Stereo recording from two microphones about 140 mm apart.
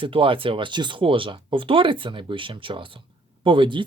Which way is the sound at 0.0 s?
40° right (ahead or behind).